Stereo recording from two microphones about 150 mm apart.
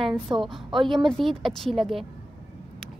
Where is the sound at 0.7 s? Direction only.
35° right (ahead or behind).